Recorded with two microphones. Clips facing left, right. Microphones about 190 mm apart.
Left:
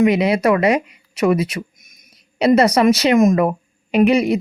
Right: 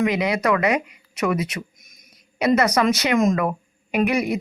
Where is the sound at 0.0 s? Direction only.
25° left (ahead or behind).